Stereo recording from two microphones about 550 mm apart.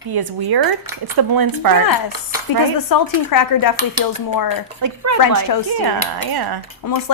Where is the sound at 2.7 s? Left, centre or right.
Left.